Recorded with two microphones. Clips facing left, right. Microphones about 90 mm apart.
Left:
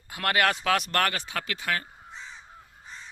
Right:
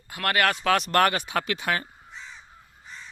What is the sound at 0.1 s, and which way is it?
Speech, 15° left (ahead or behind).